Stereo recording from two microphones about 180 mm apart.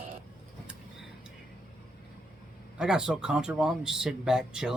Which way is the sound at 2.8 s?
5° right (ahead or behind).